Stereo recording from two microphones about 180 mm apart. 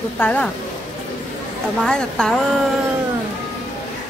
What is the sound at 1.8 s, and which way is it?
Speech, 5° left (ahead or behind).